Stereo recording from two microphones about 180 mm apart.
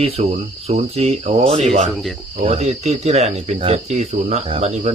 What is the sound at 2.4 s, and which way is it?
Speech, 35° right (ahead or behind).